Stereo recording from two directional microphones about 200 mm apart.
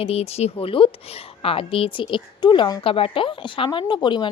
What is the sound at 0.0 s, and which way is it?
A woman's voice, 30° left (ahead or behind).